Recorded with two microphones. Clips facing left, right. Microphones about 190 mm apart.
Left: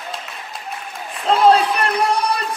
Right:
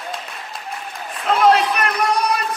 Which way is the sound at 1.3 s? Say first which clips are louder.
Left 2 dB; 30° left (ahead or behind).